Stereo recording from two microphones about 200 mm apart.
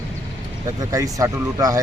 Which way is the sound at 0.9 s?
15° right (ahead or behind).